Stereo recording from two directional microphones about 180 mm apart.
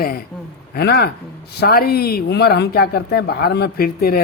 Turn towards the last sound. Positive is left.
turn(degrees=55)  # may be behind; listen again after turning